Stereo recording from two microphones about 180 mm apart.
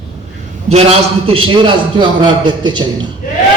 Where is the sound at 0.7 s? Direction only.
35° right (ahead or behind).